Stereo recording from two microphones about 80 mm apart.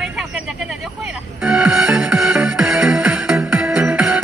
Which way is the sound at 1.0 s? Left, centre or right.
Centre.